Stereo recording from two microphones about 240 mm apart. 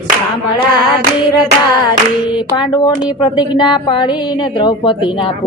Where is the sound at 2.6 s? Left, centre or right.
Centre.